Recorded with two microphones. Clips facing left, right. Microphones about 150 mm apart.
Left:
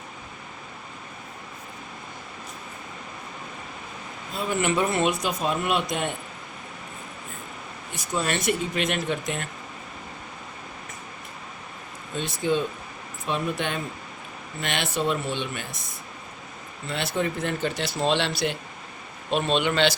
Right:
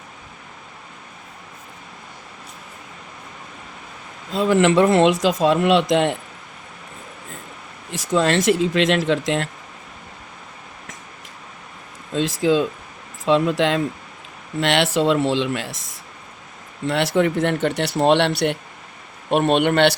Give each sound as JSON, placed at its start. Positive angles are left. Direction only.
{"t": 4.3, "sound": "a man's voice", "side_deg": -90}
{"t": 7.9, "sound": "a man's voice", "side_deg": -90}
{"t": 12.1, "sound": "a man's voice", "side_deg": -90}